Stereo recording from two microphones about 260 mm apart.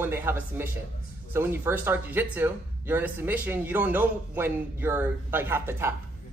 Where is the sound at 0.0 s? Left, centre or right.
Centre.